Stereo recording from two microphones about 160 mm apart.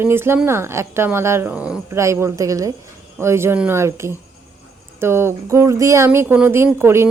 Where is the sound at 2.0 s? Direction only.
20° right (ahead or behind).